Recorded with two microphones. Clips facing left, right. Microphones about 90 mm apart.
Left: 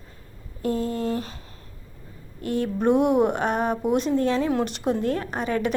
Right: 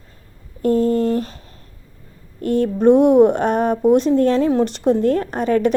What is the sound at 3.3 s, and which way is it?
A woman's voice, 40° right (ahead or behind).